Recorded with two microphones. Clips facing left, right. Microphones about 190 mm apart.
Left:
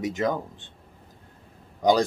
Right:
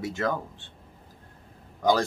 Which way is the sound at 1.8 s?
15° left (ahead or behind).